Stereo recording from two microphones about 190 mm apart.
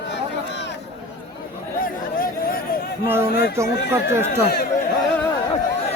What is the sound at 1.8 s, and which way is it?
Chatter, 50° left (ahead or behind).